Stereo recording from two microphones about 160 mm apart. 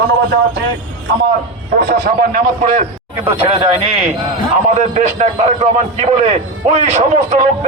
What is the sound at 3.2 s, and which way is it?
Speech, 35° right (ahead or behind).